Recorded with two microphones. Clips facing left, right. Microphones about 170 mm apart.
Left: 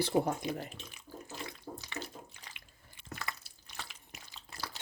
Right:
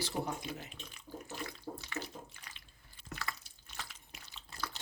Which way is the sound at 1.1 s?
20° right (ahead or behind).